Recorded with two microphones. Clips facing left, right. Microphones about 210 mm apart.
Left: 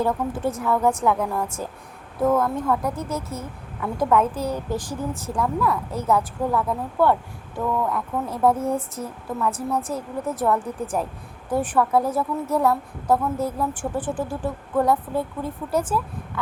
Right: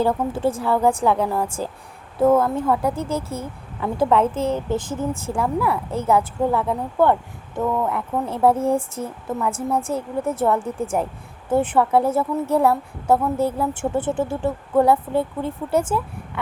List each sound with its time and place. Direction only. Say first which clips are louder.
0.0 s a woman's voice: right 3 dB; 30° right (ahead or behind)